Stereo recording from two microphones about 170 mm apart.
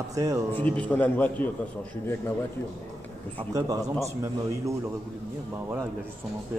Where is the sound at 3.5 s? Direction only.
20° right (ahead or behind).